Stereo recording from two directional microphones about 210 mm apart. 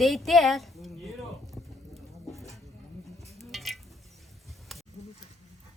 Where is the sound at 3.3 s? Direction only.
Centre (ahead or behind).